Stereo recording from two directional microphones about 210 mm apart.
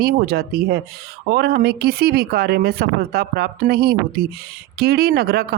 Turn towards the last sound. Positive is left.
turn(degrees=-50)  # may be behind; listen again after turning